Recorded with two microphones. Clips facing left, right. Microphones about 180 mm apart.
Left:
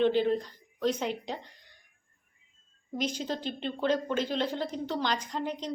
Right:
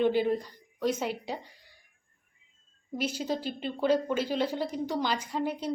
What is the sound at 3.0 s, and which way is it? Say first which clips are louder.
Speech: right 1 dB; 10° right (ahead or behind).